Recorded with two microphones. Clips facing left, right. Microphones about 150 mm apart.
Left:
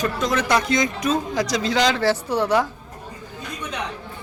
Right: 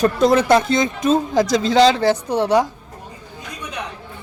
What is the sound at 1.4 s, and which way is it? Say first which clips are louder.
Speech: right 6 dB; 50° right (ahead or behind).